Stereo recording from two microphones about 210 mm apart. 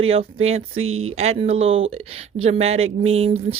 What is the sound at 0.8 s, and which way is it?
Speech, 75° right (ahead or behind).